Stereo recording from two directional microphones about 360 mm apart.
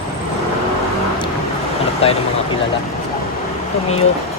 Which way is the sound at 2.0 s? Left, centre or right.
Centre.